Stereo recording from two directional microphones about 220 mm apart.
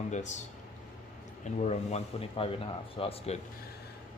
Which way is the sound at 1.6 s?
30° left (ahead or behind).